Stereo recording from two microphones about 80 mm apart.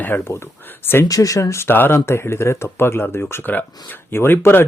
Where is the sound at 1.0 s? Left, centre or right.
Left.